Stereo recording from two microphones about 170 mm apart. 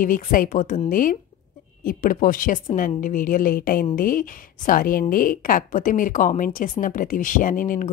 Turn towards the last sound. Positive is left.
turn(degrees=50)  # may be behind; listen again after turning